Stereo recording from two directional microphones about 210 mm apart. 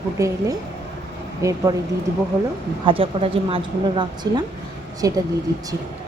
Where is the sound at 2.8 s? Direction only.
25° right (ahead or behind).